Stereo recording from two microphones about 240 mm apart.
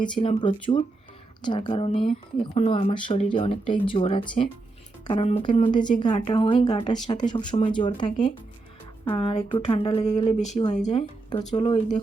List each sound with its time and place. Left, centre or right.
0.2 s speech: left